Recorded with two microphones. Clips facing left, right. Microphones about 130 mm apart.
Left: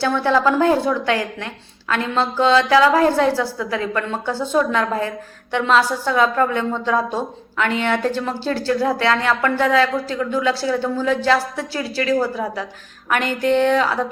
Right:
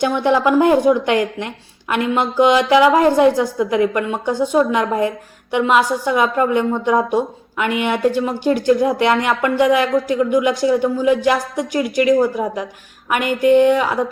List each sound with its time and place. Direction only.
0.0 s a woman's voice: 15° right (ahead or behind)